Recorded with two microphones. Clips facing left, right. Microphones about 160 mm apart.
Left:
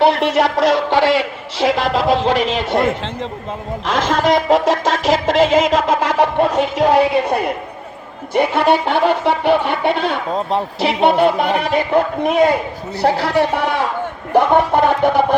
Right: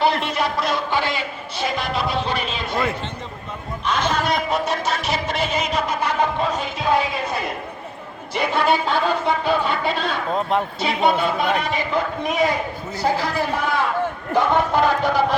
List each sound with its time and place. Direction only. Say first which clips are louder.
0.0 s speech: left 7 dB; 70° left (ahead or behind)
3.8 s speech: left 6 dB; 90° left; by 13.8 s 70° left (ahead or behind)
14.3 s speech: left 5 dB; 60° left (ahead or behind)